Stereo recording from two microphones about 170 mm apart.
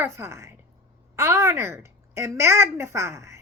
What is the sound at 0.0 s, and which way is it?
A woman's voice, 15° right (ahead or behind).